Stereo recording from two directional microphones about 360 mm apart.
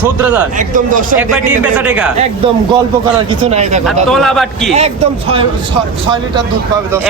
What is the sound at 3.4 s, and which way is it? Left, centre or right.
Speech, centre.